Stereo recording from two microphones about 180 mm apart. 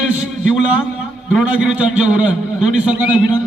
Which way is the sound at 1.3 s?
5° right (ahead or behind).